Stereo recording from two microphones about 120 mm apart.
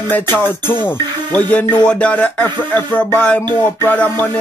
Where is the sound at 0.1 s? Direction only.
20° left (ahead or behind).